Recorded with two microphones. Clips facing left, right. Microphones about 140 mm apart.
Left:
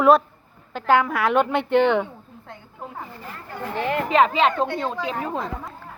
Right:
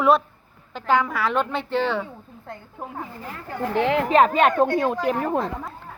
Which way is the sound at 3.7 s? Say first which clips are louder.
Right 4 dB; 80° right.